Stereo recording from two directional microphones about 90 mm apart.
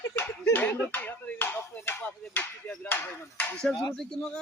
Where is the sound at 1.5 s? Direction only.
25° left (ahead or behind).